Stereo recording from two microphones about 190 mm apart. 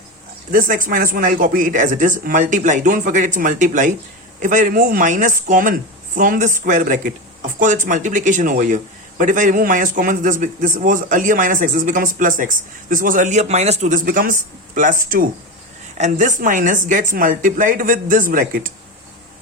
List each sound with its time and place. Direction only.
0.5 s speech: 45° right (ahead or behind)